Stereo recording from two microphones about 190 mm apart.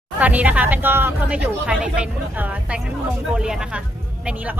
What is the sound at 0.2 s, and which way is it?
Speech, 10° right (ahead or behind).